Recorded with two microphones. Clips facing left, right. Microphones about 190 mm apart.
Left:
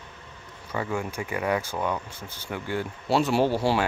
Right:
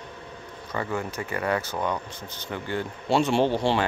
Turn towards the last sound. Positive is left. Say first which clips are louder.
# even
turn(degrees=5)  # may be behind; listen again after turning